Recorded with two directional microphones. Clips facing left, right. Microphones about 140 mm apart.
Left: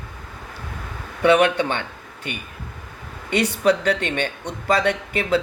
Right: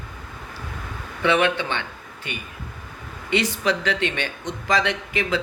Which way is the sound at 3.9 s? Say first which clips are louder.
Left 2 dB; 50° left (ahead or behind).